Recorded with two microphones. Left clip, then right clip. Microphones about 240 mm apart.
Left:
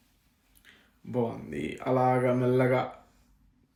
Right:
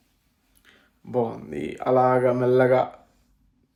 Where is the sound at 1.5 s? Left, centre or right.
Centre.